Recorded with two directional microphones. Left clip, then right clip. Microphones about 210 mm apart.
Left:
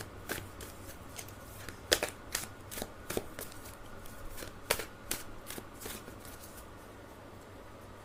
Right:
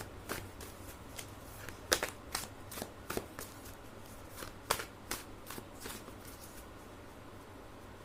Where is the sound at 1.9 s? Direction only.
5° left (ahead or behind).